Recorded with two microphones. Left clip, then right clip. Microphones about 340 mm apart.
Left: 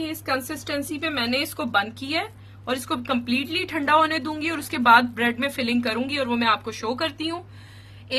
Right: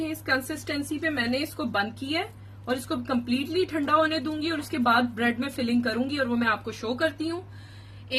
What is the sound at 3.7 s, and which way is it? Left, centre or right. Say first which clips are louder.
Speech: left 5 dB; left.